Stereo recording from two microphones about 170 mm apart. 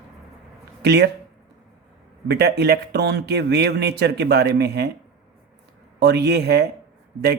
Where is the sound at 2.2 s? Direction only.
75° right (ahead or behind).